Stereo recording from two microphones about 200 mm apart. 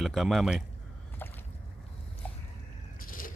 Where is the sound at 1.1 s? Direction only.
10° left (ahead or behind).